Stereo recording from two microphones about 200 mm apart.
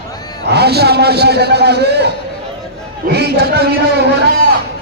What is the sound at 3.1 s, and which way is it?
Speech, 55° right (ahead or behind).